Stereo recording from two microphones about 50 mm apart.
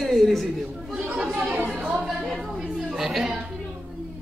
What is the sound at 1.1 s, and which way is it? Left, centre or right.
Chatter, centre.